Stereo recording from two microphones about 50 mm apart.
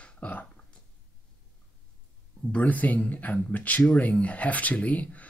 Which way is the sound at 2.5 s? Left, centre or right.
Left.